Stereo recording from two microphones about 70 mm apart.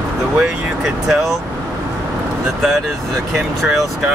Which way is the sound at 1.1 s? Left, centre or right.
Centre.